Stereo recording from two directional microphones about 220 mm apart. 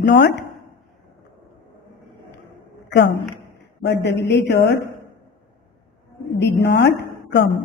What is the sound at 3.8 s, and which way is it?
Speech, 50° left (ahead or behind).